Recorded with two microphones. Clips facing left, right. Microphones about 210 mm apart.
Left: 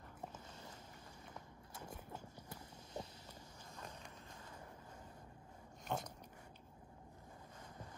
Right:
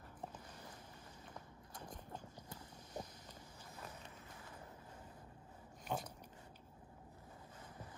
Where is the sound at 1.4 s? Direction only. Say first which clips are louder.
Even; 25° left (ahead or behind).